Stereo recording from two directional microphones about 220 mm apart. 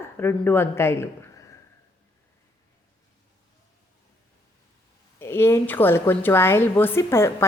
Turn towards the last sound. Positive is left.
turn(degrees=10)  # may be behind; listen again after turning